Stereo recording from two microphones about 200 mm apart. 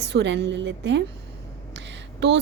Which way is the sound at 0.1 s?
60° right (ahead or behind).